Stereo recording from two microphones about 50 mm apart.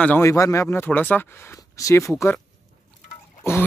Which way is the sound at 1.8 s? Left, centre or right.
Left.